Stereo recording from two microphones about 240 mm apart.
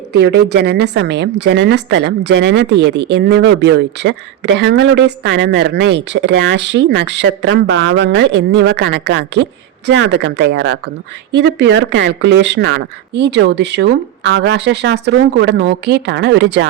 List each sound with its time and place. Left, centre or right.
0.1 s a woman's voice: right